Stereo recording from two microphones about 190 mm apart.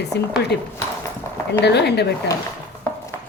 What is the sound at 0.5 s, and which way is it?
Speech, 60° left (ahead or behind).